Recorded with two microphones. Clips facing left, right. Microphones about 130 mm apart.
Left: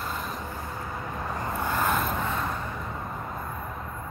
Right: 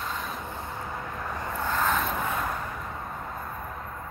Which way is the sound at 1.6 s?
10° left (ahead or behind).